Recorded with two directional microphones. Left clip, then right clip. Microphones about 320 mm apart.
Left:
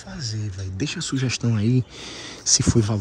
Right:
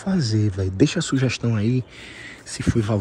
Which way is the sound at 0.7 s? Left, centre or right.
Centre.